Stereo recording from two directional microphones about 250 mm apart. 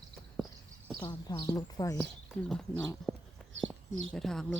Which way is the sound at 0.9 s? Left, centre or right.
Centre.